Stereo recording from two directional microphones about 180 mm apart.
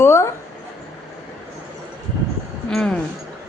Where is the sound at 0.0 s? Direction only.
15° left (ahead or behind).